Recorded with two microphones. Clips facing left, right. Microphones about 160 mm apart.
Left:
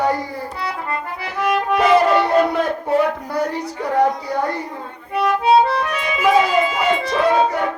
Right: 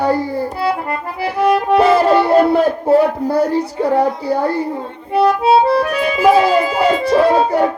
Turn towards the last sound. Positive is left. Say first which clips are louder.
# right 4 dB
turn(degrees=-35)  # may be behind; listen again after turning